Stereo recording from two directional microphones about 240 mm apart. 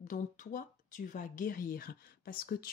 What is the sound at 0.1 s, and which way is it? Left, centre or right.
Speech, left.